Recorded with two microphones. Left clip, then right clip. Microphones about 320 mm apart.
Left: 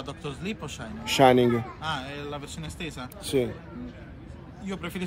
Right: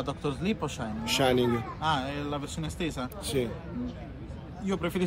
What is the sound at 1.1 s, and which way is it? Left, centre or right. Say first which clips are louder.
Speech: left 7 dB; centre.